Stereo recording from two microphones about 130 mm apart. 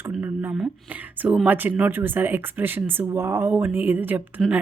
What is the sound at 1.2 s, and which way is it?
A woman's voice, 10° right (ahead or behind).